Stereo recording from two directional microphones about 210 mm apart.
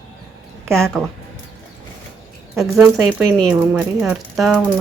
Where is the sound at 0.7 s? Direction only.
Centre (ahead or behind).